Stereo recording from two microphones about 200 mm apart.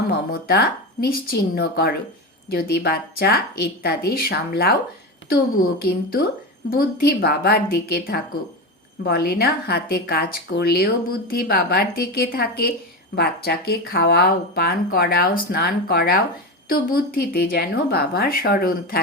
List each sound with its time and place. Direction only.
0.1 s a woman's voice: 50° left (ahead or behind)